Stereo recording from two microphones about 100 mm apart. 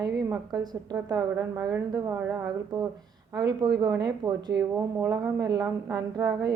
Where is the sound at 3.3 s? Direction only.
45° right (ahead or behind).